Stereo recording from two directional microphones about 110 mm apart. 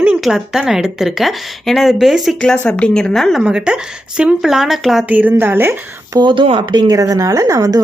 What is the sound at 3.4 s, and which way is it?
Speech, 10° right (ahead or behind).